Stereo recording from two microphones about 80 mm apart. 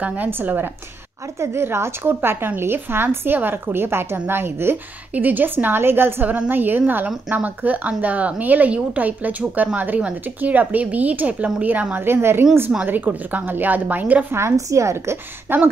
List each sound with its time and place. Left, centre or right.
0.0 s a woman's voice: right
14.4 s a woman's voice: right